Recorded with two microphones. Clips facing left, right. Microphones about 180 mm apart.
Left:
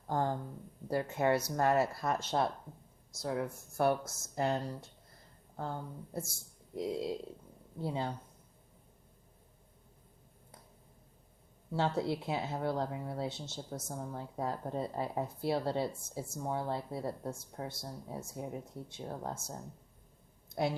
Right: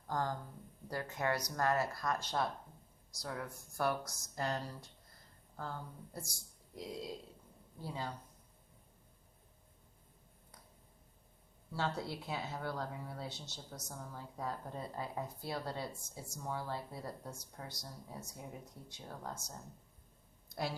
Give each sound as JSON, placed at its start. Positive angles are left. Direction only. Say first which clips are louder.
{"t": 0.1, "sound": "speech", "louder": "left 5 dB", "side_deg": 25}
{"t": 11.7, "sound": "speech", "louder": "left 7 dB", "side_deg": 25}